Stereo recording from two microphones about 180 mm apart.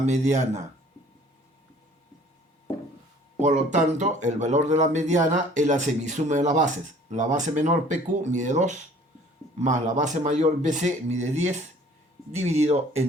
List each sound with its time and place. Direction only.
0.0 s speech: 40° right (ahead or behind)
3.3 s speech: 40° right (ahead or behind)